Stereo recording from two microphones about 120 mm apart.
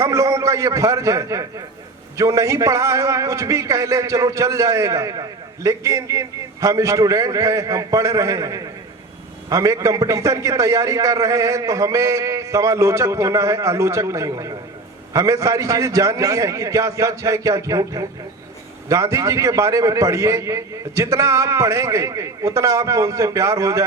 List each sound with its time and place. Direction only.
0.0 s a man's voice: 25° right (ahead or behind)